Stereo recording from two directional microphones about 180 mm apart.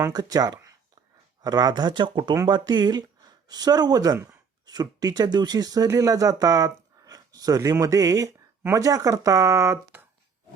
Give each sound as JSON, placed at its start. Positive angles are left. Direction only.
{"t": 0.0, "sound": "speech", "side_deg": -20}